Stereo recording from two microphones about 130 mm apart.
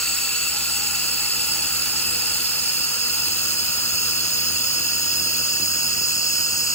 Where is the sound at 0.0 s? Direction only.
5° left (ahead or behind).